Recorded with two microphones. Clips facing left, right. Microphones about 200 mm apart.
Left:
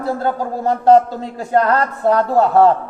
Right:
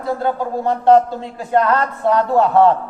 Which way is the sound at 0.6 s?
40° left (ahead or behind).